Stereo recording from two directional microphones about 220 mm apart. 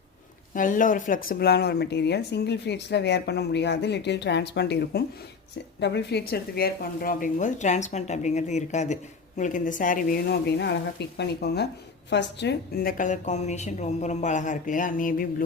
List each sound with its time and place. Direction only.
0.5 s a woman's voice: 35° left (ahead or behind)